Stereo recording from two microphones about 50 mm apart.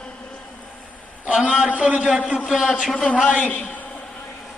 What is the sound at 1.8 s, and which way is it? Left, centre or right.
Speech, centre.